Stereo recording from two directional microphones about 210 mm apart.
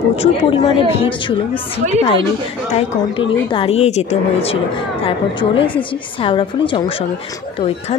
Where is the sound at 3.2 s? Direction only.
25° left (ahead or behind).